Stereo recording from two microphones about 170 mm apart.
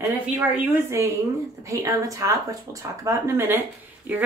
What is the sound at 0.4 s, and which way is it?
A woman's voice, 15° right (ahead or behind).